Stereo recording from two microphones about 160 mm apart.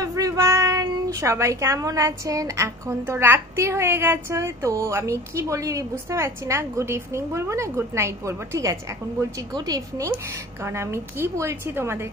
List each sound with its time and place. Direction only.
0.0 s a child's voice: 20° right (ahead or behind)